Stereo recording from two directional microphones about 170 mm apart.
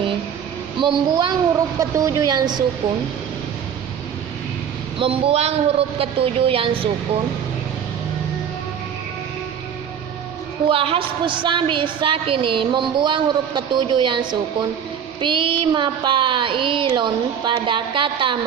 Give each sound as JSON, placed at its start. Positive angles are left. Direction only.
{"t": 0.8, "sound": "a woman's voice", "side_deg": -30}
{"t": 4.9, "sound": "a woman's voice", "side_deg": -35}
{"t": 10.7, "sound": "a woman's voice", "side_deg": -30}